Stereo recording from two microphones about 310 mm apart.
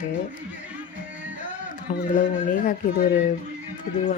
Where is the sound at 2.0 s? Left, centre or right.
Left.